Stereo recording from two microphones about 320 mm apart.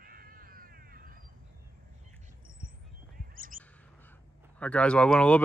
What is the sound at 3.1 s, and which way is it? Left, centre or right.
Bird, right.